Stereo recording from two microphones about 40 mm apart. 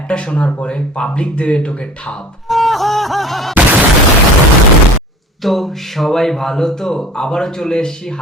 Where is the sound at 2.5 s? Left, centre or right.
Centre.